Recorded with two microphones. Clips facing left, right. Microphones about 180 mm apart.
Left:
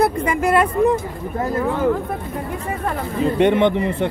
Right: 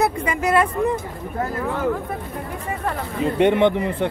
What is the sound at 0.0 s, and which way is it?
Speech, 55° left (ahead or behind).